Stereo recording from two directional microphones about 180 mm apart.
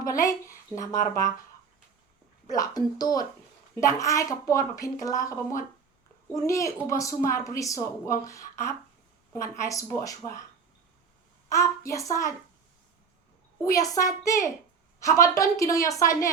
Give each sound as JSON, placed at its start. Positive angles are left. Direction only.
{"t": 0.0, "sound": "speech", "side_deg": 20}
{"t": 2.5, "sound": "a woman's voice", "side_deg": 20}
{"t": 11.4, "sound": "a woman's voice", "side_deg": 15}
{"t": 13.6, "sound": "a woman's voice", "side_deg": 20}